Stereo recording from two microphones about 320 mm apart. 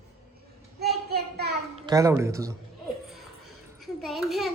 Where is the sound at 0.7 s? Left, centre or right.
Right.